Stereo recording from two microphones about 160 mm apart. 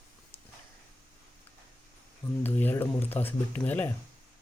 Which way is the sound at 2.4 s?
10° left (ahead or behind).